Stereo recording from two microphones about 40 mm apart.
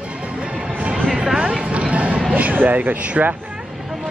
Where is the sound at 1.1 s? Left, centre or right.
Centre; by 3.1 s right.